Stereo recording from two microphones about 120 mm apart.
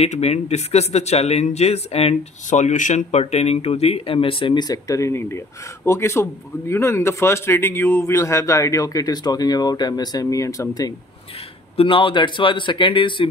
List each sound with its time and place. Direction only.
0.0 s a man's voice: 60° left (ahead or behind); by 10.9 s 30° left (ahead or behind)
11.7 s speech: 50° left (ahead or behind)